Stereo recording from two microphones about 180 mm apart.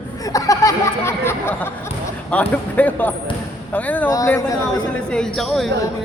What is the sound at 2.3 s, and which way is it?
Speech, 10° left (ahead or behind).